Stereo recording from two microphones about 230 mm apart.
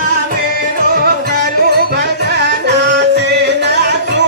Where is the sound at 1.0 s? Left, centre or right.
Right.